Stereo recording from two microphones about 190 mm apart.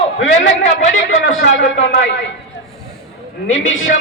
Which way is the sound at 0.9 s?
80° left.